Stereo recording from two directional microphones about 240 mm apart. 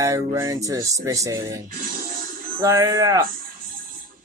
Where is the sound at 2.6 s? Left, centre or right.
Centre.